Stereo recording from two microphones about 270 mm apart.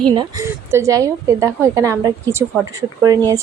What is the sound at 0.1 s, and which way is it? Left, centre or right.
A woman's voice, centre.